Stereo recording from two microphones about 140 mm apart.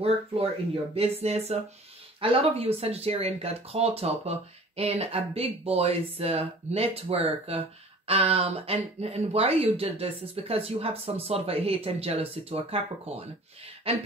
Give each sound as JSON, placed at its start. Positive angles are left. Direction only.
{"t": 0.9, "sound": "speech", "side_deg": -45}